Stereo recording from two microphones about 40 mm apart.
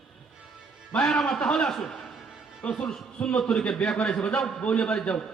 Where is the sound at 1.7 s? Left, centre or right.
Centre.